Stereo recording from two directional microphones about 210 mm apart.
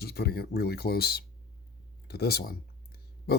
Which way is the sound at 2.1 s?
50° left (ahead or behind).